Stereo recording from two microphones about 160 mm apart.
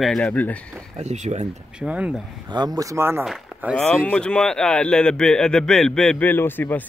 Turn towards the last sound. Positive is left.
turn(degrees=10)  # may be behind; listen again after turning